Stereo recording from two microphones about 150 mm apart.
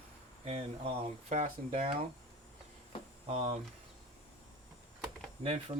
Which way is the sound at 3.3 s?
45° right (ahead or behind).